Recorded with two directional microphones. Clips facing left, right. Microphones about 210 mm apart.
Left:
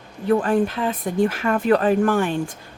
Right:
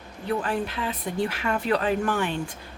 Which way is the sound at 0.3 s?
50° left (ahead or behind).